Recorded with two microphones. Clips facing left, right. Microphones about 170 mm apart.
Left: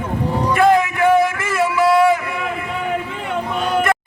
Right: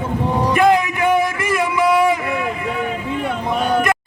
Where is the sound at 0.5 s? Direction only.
15° right (ahead or behind).